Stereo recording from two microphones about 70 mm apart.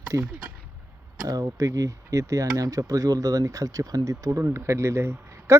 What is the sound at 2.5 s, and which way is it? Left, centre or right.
Speech, right.